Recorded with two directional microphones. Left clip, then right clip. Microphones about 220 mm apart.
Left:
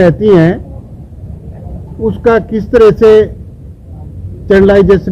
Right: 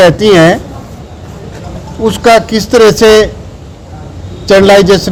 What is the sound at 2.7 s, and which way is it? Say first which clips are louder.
Speech: right 1 dB; 35° right (ahead or behind).